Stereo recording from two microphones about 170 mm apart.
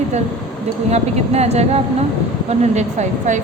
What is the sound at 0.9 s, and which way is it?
A woman's voice, 40° right (ahead or behind).